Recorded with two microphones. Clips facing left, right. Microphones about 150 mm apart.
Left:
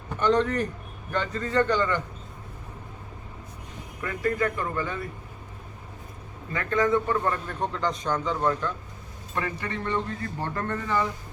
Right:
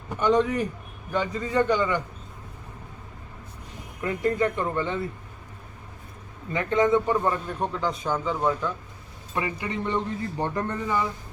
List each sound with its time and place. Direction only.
0.2 s a man's voice: 10° right (ahead or behind)
4.0 s speech: 20° right (ahead or behind)
6.5 s a man's voice: 20° right (ahead or behind)